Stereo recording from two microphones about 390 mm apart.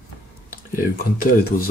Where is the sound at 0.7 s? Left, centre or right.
Left.